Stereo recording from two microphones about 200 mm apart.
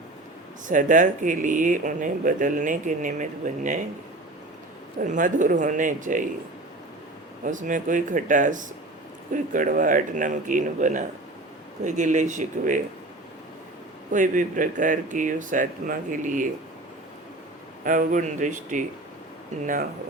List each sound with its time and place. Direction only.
0.7 s speech: 40° right (ahead or behind)
4.9 s speech: 40° right (ahead or behind)
7.4 s speech: 40° right (ahead or behind)
14.1 s speech: 40° right (ahead or behind)
17.8 s speech: 40° right (ahead or behind)